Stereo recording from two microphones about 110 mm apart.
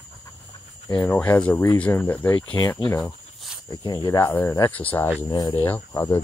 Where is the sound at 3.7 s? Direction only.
40° left (ahead or behind).